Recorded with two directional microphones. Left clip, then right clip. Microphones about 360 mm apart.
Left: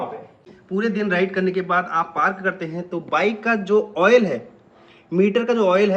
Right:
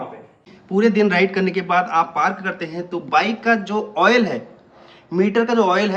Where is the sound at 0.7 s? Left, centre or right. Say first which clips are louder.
Right 5 dB; centre.